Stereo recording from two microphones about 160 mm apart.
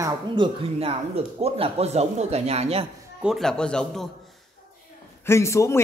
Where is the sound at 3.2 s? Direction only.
Centre (ahead or behind).